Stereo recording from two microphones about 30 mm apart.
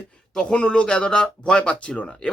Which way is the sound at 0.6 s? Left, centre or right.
Left.